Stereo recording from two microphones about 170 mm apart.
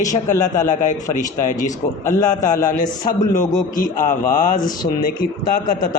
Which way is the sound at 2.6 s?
50° left (ahead or behind).